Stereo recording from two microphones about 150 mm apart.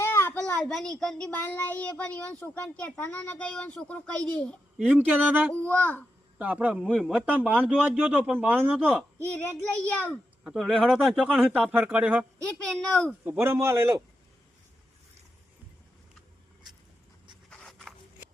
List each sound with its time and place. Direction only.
0.0 s a child's voice: 15° left (ahead or behind)
4.8 s speech: 10° right (ahead or behind)
5.6 s a child's voice: 10° left (ahead or behind)
6.4 s speech: 10° right (ahead or behind)
6.8 s speech: 5° left (ahead or behind)
7.3 s speech: 10° right (ahead or behind)
9.1 s a child's voice: 10° left (ahead or behind); by 12.2 s 10° right (ahead or behind)
12.5 s speech: 5° left (ahead or behind)
13.2 s speech: 15° right (ahead or behind)
17.5 s writing: 5° left (ahead or behind)